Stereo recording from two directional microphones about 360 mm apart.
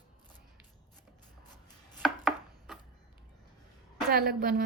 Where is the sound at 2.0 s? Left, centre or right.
Centre.